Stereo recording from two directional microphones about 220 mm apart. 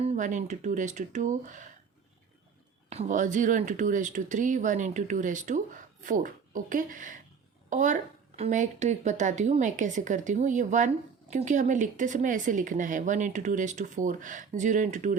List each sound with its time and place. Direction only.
0.0 s a woman's voice: 30° right (ahead or behind)
2.9 s a woman's voice: 30° right (ahead or behind)